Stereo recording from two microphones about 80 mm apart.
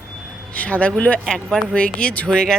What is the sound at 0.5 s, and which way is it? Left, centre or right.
Speech, centre.